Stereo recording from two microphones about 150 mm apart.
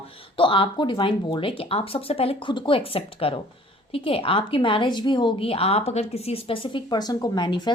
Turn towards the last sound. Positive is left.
turn(degrees=30)  # may be behind; listen again after turning